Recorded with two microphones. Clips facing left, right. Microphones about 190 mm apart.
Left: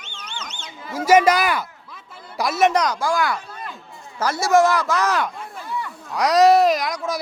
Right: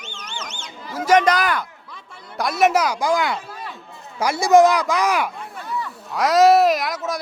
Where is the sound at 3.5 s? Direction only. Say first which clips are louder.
Right 1 dB; 5° right (ahead or behind).